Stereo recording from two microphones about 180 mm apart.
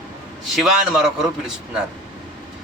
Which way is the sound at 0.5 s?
Centre (ahead or behind).